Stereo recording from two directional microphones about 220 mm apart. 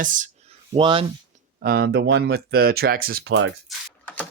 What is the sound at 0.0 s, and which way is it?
Speech, 35° right (ahead or behind).